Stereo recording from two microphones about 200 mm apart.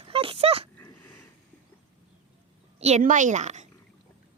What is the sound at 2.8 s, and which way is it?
Speech, 35° right (ahead or behind).